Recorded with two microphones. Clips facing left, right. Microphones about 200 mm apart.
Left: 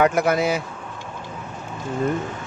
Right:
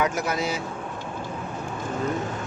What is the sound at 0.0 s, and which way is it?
Speech, 55° left (ahead or behind).